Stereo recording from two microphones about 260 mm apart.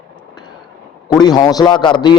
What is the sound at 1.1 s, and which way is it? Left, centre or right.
A man's voice, centre.